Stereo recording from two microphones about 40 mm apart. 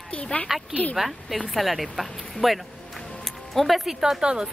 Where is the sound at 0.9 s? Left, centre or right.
Centre.